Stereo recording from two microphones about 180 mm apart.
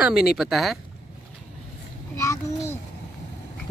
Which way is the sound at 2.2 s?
15° left (ahead or behind).